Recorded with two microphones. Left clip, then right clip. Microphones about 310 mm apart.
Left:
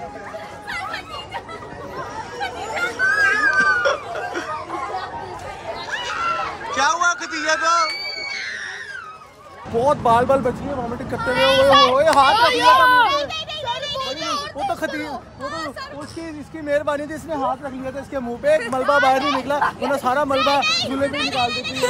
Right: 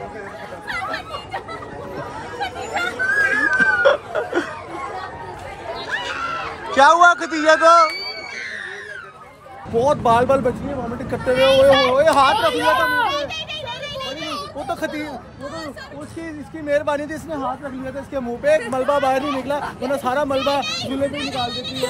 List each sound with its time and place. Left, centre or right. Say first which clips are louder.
0.7 s chatter: right 3 dB; centre
2.3 s a sound: right 2 dB; centre
5.9 s run: left 2 dB; centre
9.8 s speech: even; centre
11.1 s a sound: right 2 dB; centre
16.6 s a child's voice: right 1 dB; centre